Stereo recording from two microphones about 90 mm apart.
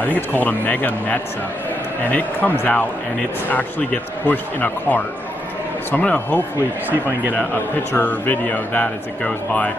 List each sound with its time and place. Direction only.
0.0 s speech: 20° left (ahead or behind)
6.9 s speech: 20° right (ahead or behind)
7.9 s speech: 20° left (ahead or behind)